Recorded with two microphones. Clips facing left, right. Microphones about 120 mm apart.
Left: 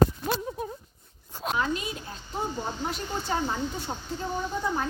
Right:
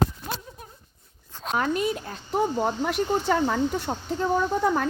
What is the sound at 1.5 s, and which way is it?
Speech, 55° right (ahead or behind).